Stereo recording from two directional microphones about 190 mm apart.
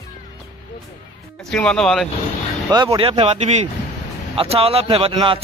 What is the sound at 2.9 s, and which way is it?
Speech, 30° right (ahead or behind).